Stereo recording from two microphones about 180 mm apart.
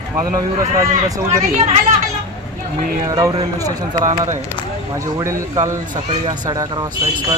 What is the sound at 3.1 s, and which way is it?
Speech, 20° right (ahead or behind).